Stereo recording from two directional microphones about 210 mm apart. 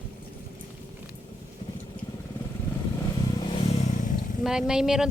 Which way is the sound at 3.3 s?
25° left (ahead or behind).